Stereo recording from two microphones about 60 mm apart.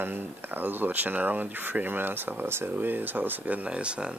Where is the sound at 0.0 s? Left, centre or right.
Right.